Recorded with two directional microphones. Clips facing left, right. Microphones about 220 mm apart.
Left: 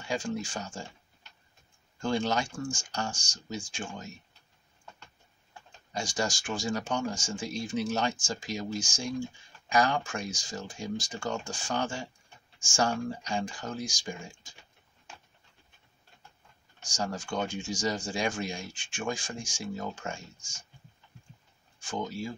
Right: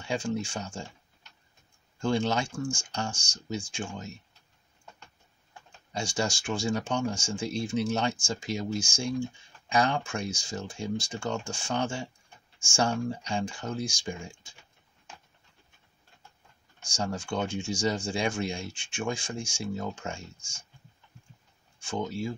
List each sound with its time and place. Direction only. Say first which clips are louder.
0.1 s speech: right 2 dB; 25° right (ahead or behind)
2.0 s speech: right 2 dB; 25° right (ahead or behind)
5.9 s speech: right 1 dB; 25° right (ahead or behind)
17.3 s speech: right 2 dB; 25° right (ahead or behind)
21.7 s speech: right 2 dB; 25° right (ahead or behind)